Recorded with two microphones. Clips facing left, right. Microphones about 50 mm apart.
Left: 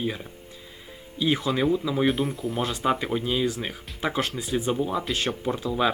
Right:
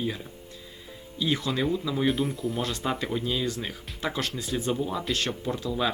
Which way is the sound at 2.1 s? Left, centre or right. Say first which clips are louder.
Left 1 dB; centre.